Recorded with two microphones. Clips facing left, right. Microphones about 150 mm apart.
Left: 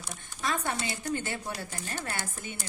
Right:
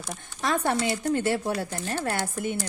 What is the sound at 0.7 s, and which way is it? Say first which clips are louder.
Speech: right 7 dB; 70° right (ahead or behind).